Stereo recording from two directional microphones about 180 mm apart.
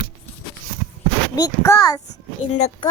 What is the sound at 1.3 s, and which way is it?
Speech, 20° left (ahead or behind).